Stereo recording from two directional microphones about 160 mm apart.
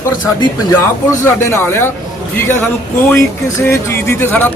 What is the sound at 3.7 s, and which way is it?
Speech, 15° left (ahead or behind).